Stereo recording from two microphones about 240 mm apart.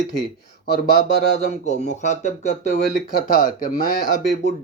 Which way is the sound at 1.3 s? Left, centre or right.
Left.